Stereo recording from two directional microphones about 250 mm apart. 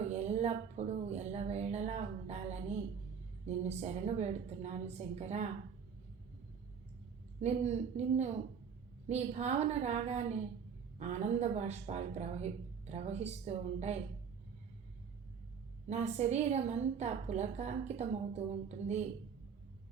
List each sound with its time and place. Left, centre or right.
0.1 s a woman's voice: right
7.4 s a woman's voice: right
15.9 s a woman's voice: right